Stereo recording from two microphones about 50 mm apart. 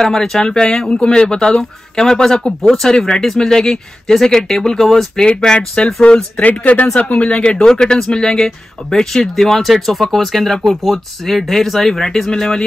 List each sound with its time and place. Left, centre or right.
0.0 s speech: centre